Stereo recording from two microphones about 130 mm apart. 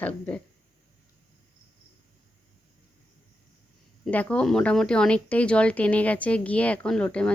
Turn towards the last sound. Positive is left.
turn(degrees=10)  # may be behind; listen again after turning